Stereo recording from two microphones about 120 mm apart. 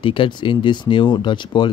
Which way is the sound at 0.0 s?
45° left (ahead or behind).